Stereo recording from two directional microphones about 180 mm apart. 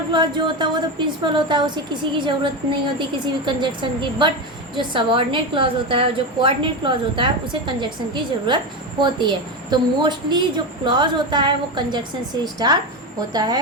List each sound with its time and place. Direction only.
0.1 s a woman's voice: 25° right (ahead or behind)